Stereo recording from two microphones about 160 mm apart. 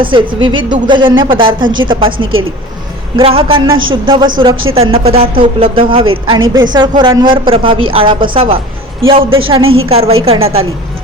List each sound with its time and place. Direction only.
0.0 s speech: 30° right (ahead or behind)